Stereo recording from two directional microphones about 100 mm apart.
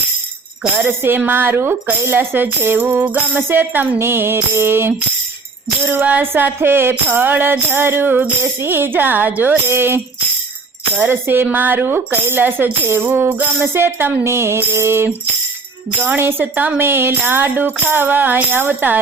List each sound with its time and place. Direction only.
0.6 s speech: 10° right (ahead or behind)
0.9 s tambourine: 20° right (ahead or behind)